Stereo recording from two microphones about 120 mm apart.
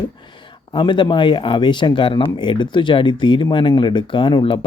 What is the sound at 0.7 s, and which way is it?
Speech, 40° left (ahead or behind).